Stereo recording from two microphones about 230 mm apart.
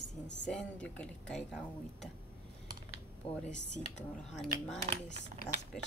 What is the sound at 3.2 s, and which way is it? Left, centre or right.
Speech, left.